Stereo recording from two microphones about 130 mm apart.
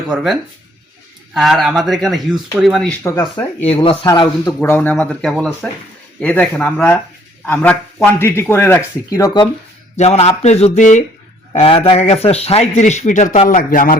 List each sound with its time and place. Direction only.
0.1 s speech: centre (ahead or behind)
3.1 s speech: 20° left (ahead or behind)
4.1 s speech: 35° left (ahead or behind)
4.6 s speech: 15° left (ahead or behind); by 9.5 s 30° left (ahead or behind)
10.0 s speech: 55° left (ahead or behind)
11.5 s speech: 50° left (ahead or behind); by 13.4 s 75° left (ahead or behind)
13.5 s speech: 90° left